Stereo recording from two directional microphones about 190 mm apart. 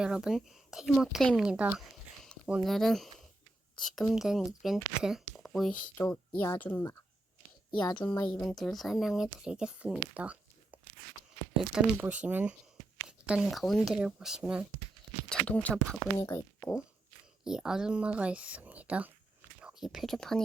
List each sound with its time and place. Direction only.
0.0 s speech: 5° right (ahead or behind)
7.7 s a woman's voice: 25° left (ahead or behind)
8.4 s speech: centre (ahead or behind)
15.3 s speech: 5° left (ahead or behind)
16.1 s speech: 15° left (ahead or behind)
17.4 s speech: 5° right (ahead or behind)